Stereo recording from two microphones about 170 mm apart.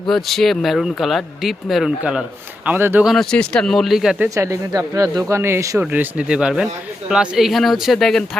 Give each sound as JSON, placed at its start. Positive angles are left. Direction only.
{"t": 0.1, "sound": "speech", "side_deg": 0}
{"t": 3.1, "sound": "speech", "side_deg": 5}
{"t": 4.4, "sound": "speech", "side_deg": -20}